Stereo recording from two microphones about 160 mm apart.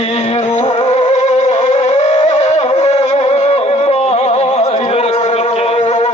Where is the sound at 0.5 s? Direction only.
45° left (ahead or behind).